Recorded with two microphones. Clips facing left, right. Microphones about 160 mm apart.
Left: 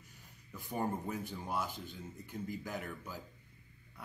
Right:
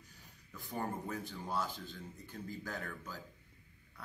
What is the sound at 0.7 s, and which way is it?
A man's voice, 15° left (ahead or behind).